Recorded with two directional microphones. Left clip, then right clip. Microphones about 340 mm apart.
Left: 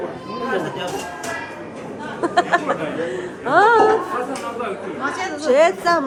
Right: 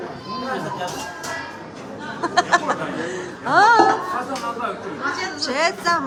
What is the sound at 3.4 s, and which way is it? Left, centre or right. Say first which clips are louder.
Speech: even; centre.